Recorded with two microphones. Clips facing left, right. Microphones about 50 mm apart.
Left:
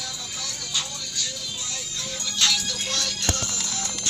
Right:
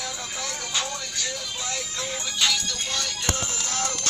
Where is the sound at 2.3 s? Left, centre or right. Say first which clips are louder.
Left 1 dB; centre.